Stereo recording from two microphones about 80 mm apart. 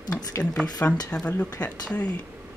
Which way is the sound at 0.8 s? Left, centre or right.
Left.